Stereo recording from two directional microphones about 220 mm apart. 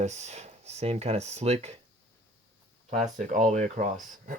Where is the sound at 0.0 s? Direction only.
30° right (ahead or behind).